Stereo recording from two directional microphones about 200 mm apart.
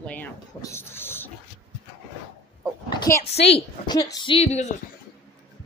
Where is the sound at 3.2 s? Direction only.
30° left (ahead or behind).